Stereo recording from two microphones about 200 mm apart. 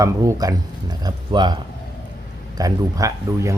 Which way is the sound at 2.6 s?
15° right (ahead or behind).